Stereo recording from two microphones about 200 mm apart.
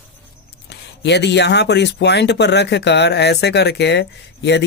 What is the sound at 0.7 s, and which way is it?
Speech, 55° left (ahead or behind).